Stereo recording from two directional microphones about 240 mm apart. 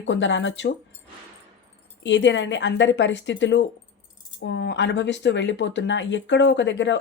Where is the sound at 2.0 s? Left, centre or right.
Left.